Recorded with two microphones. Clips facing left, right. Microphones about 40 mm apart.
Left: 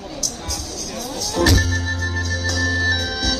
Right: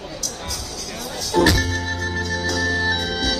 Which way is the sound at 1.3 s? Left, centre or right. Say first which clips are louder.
Right 1 dB; right.